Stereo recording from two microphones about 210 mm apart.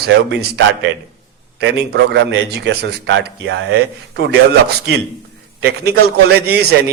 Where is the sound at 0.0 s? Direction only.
55° right (ahead or behind).